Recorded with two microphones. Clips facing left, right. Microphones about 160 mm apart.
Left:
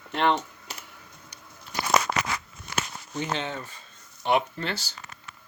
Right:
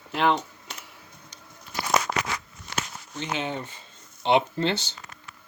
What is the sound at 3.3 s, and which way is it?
Speech, 20° right (ahead or behind).